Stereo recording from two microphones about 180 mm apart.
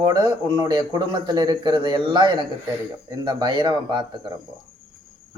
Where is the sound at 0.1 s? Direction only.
25° right (ahead or behind).